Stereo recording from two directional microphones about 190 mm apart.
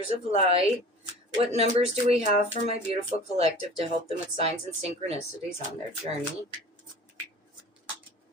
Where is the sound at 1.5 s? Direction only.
35° right (ahead or behind).